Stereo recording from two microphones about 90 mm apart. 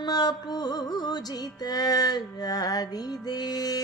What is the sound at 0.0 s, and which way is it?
Music, 50° left (ahead or behind).